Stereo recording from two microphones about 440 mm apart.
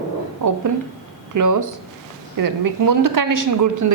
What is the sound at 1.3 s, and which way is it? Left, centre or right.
Speech, right.